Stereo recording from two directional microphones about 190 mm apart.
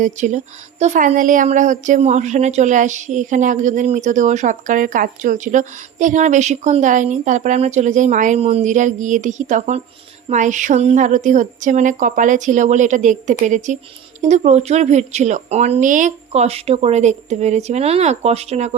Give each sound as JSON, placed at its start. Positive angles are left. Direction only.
{"t": 0.0, "sound": "a woman's voice", "side_deg": -40}